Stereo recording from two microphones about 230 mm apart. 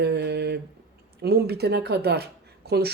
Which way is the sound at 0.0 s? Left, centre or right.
Right.